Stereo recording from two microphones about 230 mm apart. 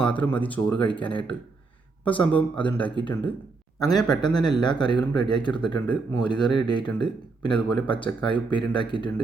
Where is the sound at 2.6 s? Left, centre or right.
Centre.